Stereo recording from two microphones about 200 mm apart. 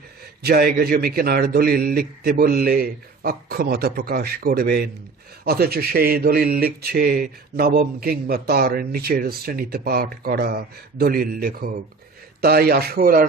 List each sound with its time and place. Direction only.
0.4 s speech: 50° right (ahead or behind)